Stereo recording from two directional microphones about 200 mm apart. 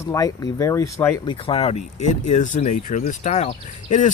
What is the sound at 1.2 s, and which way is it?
Speech, 25° left (ahead or behind).